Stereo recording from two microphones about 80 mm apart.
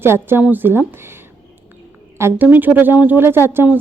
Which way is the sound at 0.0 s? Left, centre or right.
Right.